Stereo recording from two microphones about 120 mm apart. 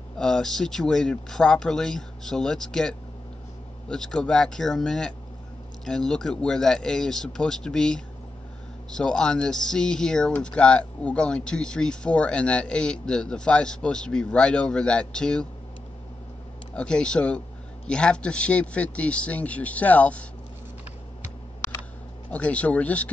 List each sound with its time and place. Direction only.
0.2 s speech: 5° left (ahead or behind)
16.7 s speech: 10° left (ahead or behind)
22.3 s speech: 10° left (ahead or behind)